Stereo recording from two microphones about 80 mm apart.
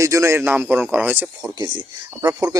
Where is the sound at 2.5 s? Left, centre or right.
Right.